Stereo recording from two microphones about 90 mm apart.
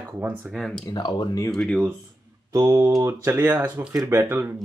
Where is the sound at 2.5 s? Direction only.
45° right (ahead or behind).